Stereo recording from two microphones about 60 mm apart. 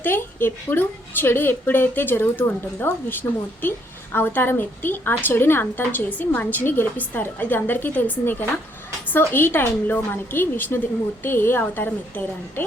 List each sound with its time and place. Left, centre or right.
0.0 s a woman's voice: left
11.6 s a woman's voice: left